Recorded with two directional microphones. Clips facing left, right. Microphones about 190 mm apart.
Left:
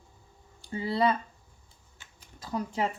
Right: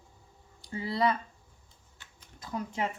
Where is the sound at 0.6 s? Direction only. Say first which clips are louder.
Left 2 dB; 25° left (ahead or behind).